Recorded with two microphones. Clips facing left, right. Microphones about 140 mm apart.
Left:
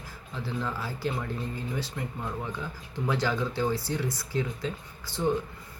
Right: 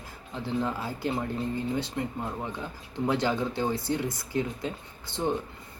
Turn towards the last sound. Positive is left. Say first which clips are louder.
# left 1 dB
turn(degrees=-20)  # may be behind; listen again after turning